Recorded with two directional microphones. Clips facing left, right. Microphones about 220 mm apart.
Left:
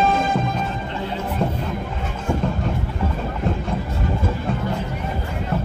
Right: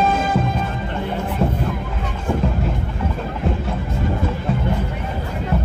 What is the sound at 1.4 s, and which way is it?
Music, 5° right (ahead or behind).